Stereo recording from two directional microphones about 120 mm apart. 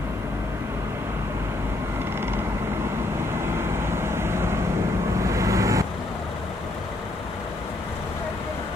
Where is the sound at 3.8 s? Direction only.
20° right (ahead or behind).